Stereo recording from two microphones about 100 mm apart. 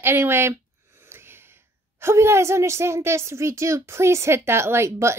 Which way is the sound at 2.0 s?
25° right (ahead or behind).